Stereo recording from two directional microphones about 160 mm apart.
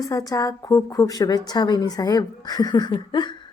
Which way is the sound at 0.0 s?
20° left (ahead or behind).